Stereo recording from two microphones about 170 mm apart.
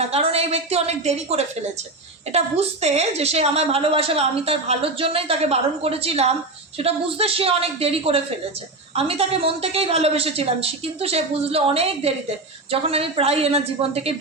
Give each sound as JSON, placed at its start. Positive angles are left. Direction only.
{"t": 0.0, "sound": "a woman's voice", "side_deg": -35}